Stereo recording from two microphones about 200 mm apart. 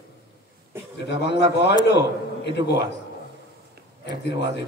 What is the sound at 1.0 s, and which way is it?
A man's voice, 60° left (ahead or behind).